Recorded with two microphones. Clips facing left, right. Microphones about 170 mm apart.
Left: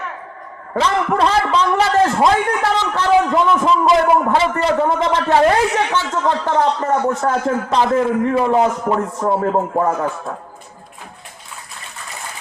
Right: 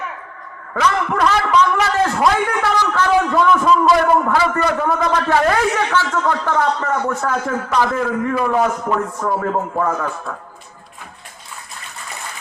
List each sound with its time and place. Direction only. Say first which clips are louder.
0.7 s a man's voice: left 1 dB; 30° left (ahead or behind)